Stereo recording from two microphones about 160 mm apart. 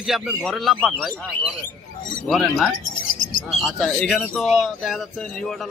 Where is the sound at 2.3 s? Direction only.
Centre (ahead or behind).